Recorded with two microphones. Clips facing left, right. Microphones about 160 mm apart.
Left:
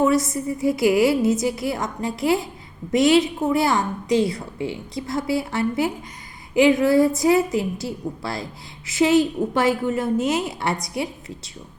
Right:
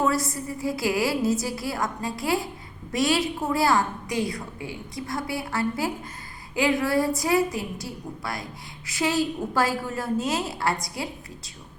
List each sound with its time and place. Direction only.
0.0 s a woman's voice: 20° left (ahead or behind)